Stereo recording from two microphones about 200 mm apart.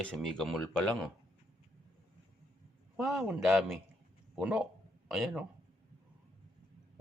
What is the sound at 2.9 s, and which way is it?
A man's voice, 5° right (ahead or behind).